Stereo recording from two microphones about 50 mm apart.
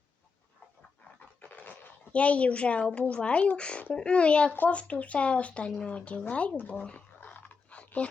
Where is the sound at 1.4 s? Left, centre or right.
Left.